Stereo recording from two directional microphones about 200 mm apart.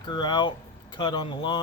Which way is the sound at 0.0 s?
20° left (ahead or behind).